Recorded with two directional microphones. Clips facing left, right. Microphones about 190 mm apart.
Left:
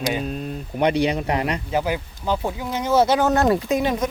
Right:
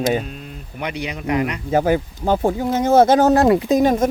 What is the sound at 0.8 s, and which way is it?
Speech, 35° left (ahead or behind).